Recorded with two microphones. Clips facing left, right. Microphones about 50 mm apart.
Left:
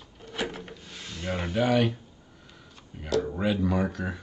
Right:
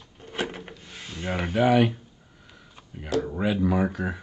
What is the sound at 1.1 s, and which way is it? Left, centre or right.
Speech, centre.